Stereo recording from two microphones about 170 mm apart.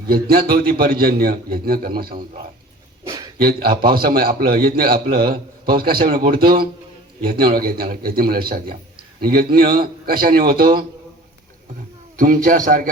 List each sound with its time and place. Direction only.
0.4 s a man's voice: 60° right (ahead or behind)
3.0 s a sound: 25° right (ahead or behind)
3.3 s a man's voice: 60° right (ahead or behind)
12.1 s a man's voice: 55° right (ahead or behind)